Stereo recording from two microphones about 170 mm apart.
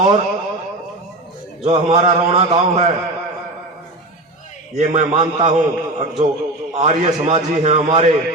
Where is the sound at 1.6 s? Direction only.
35° right (ahead or behind).